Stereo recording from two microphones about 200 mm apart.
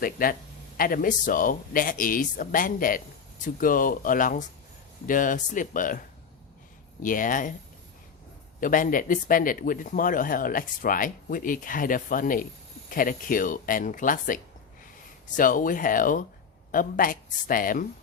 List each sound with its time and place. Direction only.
0.0 s speech: 45° left (ahead or behind)
7.0 s speech: 40° left (ahead or behind)
8.6 s speech: 40° left (ahead or behind)